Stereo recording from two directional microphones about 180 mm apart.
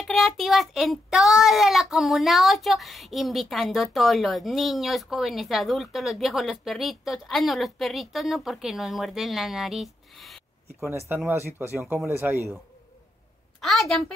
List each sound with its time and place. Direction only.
0.0 s a child's voice: centre (ahead or behind)
11.1 s speech: 10° right (ahead or behind)
13.6 s a child's voice: centre (ahead or behind)